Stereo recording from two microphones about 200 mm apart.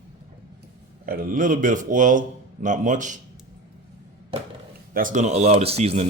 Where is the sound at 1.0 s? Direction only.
45° right (ahead or behind).